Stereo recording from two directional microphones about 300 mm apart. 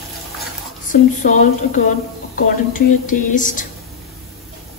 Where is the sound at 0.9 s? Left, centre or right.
Left.